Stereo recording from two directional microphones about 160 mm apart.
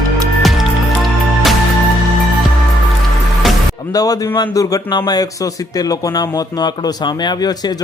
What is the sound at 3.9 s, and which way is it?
Speech, 20° left (ahead or behind).